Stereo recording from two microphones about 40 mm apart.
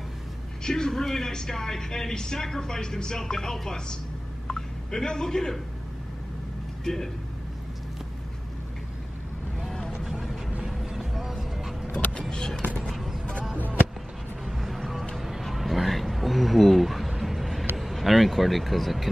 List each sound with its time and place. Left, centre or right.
0.7 s a woman's voice: centre
4.5 s a sound: centre
6.8 s a man's voice: centre
10.0 s vehicle: centre
10.7 s music: centre
12.1 s speech: left
12.7 s clip-clop: centre
13.2 s a sound: left
14.4 s music: centre
15.1 s a sound: centre
17.2 s vehicle: centre
17.7 s a sound: centre